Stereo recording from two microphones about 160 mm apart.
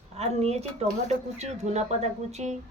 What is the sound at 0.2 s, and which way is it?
Speech, 40° right (ahead or behind).